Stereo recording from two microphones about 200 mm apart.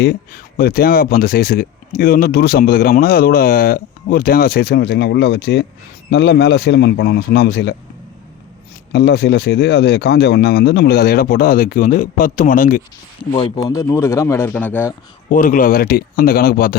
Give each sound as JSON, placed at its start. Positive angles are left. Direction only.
{"t": 0.0, "sound": "a man's voice", "side_deg": 50}
{"t": 8.9, "sound": "speech", "side_deg": 55}
{"t": 13.3, "sound": "speech", "side_deg": 20}
{"t": 15.3, "sound": "speech", "side_deg": 40}